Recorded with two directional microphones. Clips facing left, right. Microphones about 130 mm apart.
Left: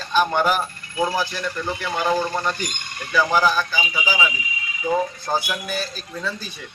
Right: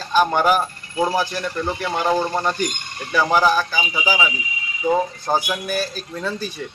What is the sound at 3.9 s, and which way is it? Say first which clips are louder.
A man's voice: right 2 dB; 30° right (ahead or behind).